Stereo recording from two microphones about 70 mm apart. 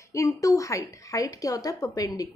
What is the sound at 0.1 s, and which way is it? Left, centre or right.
A woman's voice, left.